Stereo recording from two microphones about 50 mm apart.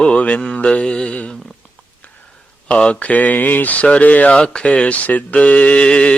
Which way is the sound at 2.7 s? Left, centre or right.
Left.